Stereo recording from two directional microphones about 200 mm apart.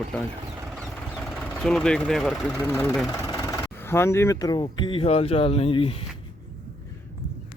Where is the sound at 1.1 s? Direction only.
5° left (ahead or behind); by 6.1 s 25° left (ahead or behind).